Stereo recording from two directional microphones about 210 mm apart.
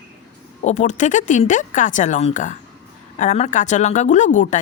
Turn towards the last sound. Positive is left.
turn(degrees=35)  # may be behind; listen again after turning